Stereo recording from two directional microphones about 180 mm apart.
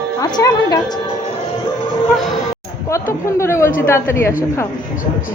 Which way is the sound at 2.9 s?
15° left (ahead or behind).